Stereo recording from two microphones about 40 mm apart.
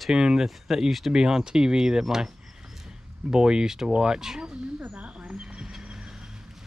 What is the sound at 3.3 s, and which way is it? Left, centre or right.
Speech, centre.